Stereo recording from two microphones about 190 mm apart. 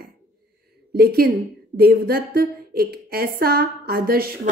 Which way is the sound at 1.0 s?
55° right (ahead or behind).